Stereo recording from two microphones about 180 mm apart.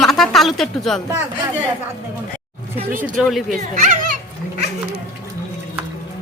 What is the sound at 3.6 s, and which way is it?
Speech, 45° right (ahead or behind).